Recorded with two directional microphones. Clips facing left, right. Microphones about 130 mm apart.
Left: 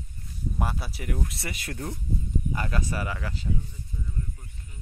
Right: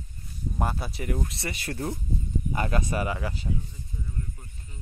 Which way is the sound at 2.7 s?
20° right (ahead or behind).